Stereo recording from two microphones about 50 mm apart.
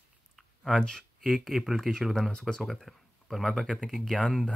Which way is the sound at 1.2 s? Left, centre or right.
Centre.